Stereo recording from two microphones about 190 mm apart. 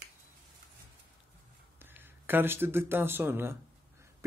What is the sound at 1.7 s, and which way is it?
A man's voice, 10° right (ahead or behind).